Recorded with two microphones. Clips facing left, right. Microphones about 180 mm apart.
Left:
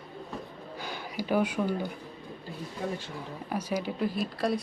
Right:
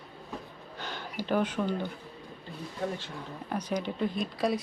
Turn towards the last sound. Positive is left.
turn(degrees=0)  # may be behind; listen again after turning